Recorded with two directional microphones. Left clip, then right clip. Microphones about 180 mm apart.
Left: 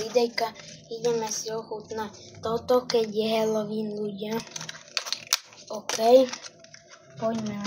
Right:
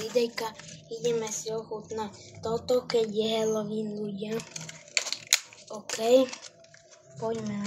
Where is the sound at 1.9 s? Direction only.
20° right (ahead or behind).